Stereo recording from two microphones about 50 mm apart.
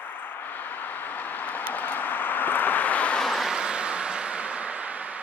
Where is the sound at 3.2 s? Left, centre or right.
Centre.